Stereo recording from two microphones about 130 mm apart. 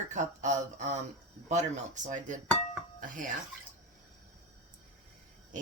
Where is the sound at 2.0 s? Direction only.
70° right (ahead or behind).